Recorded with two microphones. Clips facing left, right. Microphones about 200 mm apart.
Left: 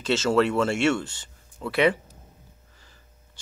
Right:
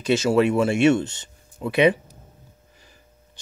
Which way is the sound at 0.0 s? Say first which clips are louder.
Right 3 dB; 15° right (ahead or behind).